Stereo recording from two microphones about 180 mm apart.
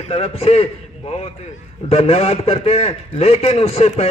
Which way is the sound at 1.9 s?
35° left (ahead or behind).